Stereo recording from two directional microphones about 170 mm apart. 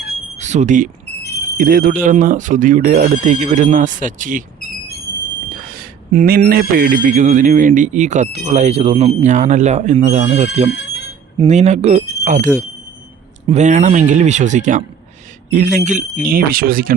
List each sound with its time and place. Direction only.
0.3 s speech: 45° right (ahead or behind)
5.6 s a sound: 60° right (ahead or behind)
6.4 s speech: 60° right (ahead or behind); by 10.7 s 40° right (ahead or behind)
10.7 s alarm: 90° left
11.4 s speech: 40° right (ahead or behind)
13.5 s speech: 45° right (ahead or behind)